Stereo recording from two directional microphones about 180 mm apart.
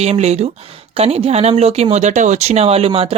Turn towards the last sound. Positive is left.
turn(degrees=-30)  # may be behind; listen again after turning